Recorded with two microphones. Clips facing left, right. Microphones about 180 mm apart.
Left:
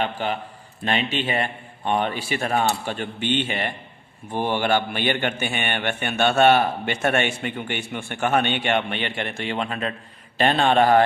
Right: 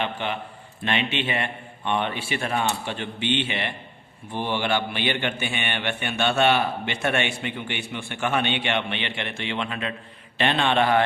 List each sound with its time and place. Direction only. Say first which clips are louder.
0.0 s a man's voice: left 3 dB; 40° left (ahead or behind)